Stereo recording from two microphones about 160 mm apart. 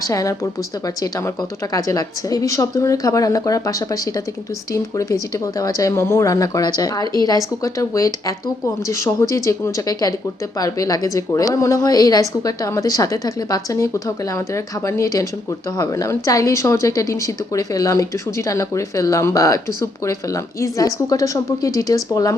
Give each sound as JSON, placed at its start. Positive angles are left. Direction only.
{"t": 0.1, "sound": "a woman's voice", "side_deg": 20}